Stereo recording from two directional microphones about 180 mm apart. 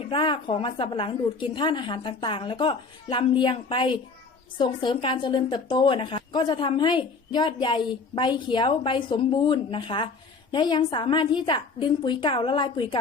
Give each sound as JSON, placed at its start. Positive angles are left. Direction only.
{"t": 0.1, "sound": "a woman's voice", "side_deg": 25}